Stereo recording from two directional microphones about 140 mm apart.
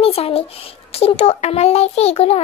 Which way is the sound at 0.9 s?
45° left (ahead or behind).